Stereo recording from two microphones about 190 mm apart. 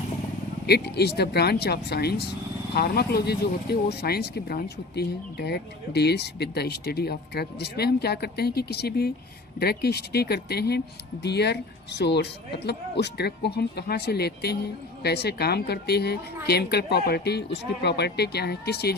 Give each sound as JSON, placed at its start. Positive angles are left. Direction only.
{"t": 0.7, "sound": "speech", "side_deg": 60}